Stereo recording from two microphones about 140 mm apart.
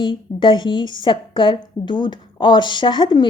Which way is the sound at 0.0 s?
35° left (ahead or behind).